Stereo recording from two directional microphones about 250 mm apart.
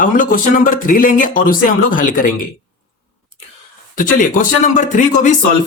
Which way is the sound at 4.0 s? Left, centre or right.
Left.